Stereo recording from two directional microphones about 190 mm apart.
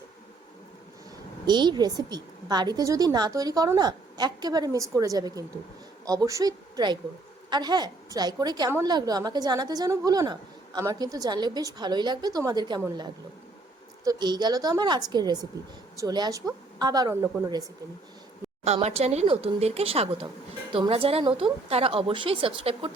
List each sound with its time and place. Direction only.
1.5 s a woman's voice: 25° right (ahead or behind)
14.0 s a woman's voice: 20° right (ahead or behind)
18.6 s a woman's voice: 35° right (ahead or behind)